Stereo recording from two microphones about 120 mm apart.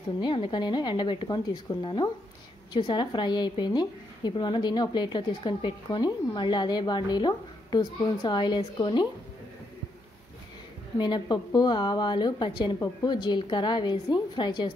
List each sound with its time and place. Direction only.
0.2 s a woman's voice: 45° left (ahead or behind)
11.0 s a woman's voice: 40° left (ahead or behind)